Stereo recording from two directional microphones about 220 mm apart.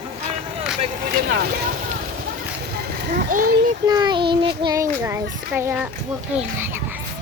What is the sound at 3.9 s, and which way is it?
Child singing, 20° right (ahead or behind).